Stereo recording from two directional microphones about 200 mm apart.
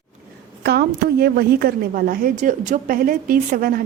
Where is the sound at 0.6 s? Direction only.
55° right (ahead or behind).